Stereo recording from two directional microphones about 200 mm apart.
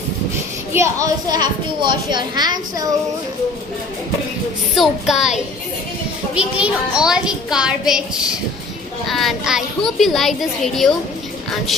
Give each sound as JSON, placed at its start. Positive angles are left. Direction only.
{"t": 0.7, "sound": "a child's voice", "side_deg": -15}
{"t": 4.7, "sound": "a child's voice", "side_deg": 0}
{"t": 9.0, "sound": "a child's voice", "side_deg": 0}